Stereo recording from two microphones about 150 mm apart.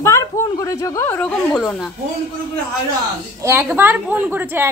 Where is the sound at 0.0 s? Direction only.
20° left (ahead or behind); by 1.9 s centre (ahead or behind).